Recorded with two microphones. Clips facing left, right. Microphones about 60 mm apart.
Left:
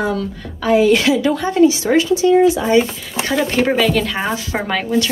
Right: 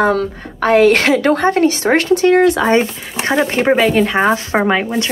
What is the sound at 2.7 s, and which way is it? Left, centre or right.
Speech, right.